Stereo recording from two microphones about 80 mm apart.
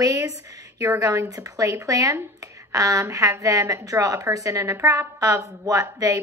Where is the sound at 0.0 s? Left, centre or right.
Right.